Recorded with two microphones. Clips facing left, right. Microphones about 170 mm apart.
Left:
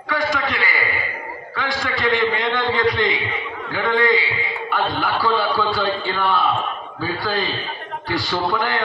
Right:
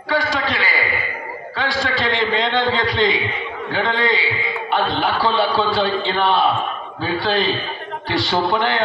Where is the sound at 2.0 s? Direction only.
30° right (ahead or behind).